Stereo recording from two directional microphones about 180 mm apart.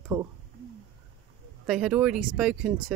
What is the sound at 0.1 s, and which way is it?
Speech, 15° right (ahead or behind).